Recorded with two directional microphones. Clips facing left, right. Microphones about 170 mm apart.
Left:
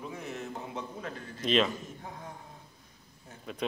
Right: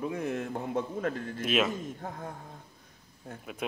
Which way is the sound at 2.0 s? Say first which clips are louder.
Right 5 dB; 55° right (ahead or behind).